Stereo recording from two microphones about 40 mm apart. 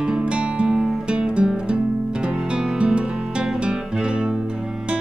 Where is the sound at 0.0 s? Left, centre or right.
Right.